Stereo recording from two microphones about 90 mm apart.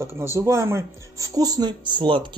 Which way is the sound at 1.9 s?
60° right (ahead or behind).